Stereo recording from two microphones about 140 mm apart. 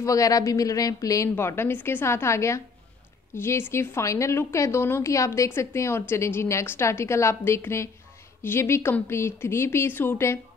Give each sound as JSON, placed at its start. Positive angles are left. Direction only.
{"t": 0.0, "sound": "a woman's voice", "side_deg": 25}